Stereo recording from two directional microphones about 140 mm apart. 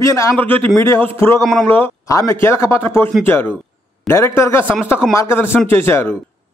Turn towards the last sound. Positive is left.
turn(degrees=15)  # may be behind; listen again after turning